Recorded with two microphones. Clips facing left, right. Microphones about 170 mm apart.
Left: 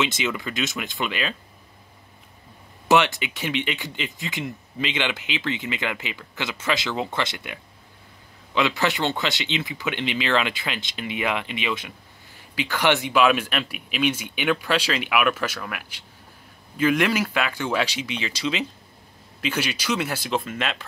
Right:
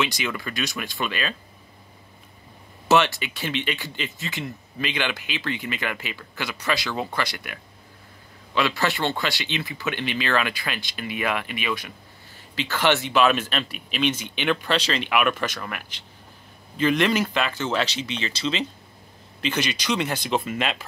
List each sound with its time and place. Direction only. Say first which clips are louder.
0.0 s speech: left 1 dB; 20° left (ahead or behind)
2.9 s speech: even; 15° left (ahead or behind)
8.5 s speech: left 1 dB; 20° left (ahead or behind); by 20.8 s 5° right (ahead or behind)